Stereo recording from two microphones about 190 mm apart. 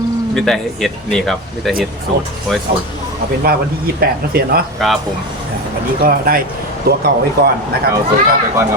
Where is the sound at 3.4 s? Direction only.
55° right (ahead or behind).